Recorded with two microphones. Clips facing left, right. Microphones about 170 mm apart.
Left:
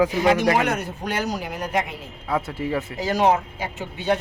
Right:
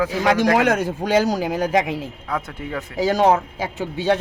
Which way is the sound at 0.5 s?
90° right.